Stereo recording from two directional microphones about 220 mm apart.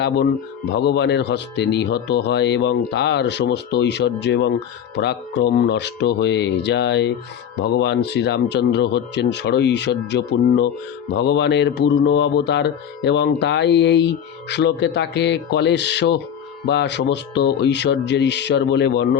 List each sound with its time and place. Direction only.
0.8 s speech: 50° left (ahead or behind)